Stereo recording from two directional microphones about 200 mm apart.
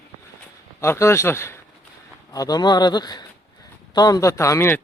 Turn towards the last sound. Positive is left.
turn(degrees=10)  # may be behind; listen again after turning